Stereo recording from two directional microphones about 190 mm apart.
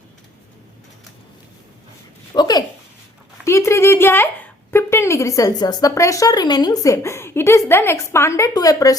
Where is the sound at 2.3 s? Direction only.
20° left (ahead or behind).